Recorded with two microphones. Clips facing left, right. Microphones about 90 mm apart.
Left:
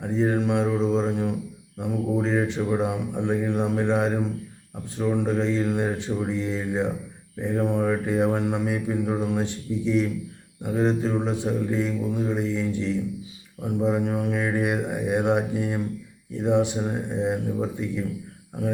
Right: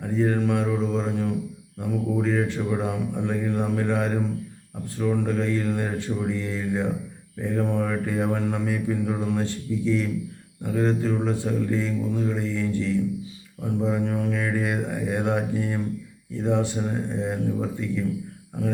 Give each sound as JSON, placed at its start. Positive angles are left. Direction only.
{"t": 0.0, "sound": "mantra", "side_deg": 20}